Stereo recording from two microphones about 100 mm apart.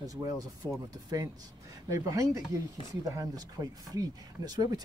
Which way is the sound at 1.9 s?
35° right (ahead or behind).